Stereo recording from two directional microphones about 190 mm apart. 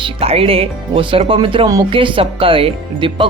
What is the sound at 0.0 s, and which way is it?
Speech, 30° right (ahead or behind).